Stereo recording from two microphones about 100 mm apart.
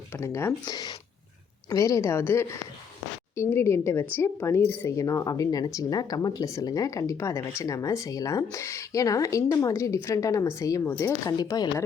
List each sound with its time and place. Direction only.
0.1 s a woman's voice: 25° left (ahead or behind)
0.6 s speech: 45° left (ahead or behind)
1.7 s a woman's voice: 30° left (ahead or behind)
11.3 s speech: 40° left (ahead or behind)